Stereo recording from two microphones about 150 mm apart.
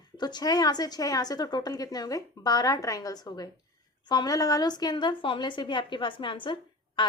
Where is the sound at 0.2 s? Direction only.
30° left (ahead or behind).